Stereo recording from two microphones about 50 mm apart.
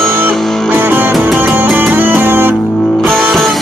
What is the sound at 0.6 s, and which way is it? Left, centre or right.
Music, right.